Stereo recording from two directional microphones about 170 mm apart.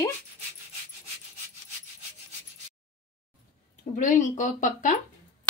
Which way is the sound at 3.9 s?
50° left (ahead or behind).